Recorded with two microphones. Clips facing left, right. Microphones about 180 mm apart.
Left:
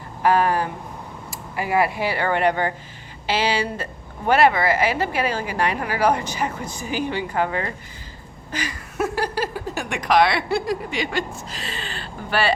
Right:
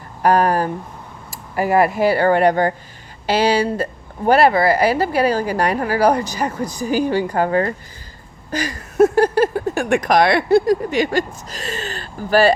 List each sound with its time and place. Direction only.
0.2 s a woman's voice: 40° right (ahead or behind)